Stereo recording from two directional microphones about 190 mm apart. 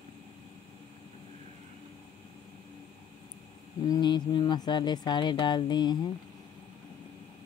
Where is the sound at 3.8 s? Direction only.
20° left (ahead or behind).